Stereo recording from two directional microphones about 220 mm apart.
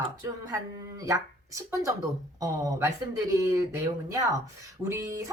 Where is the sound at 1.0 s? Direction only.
15° right (ahead or behind).